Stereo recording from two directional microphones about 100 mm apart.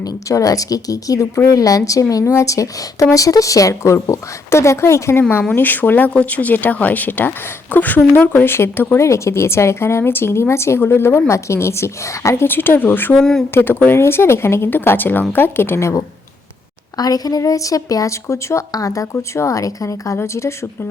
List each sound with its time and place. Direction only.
0.0 s speech: 35° left (ahead or behind); by 13.1 s 20° left (ahead or behind)
13.1 s speech: 5° left (ahead or behind)
13.5 s speech: 20° left (ahead or behind)
17.0 s speech: 40° left (ahead or behind)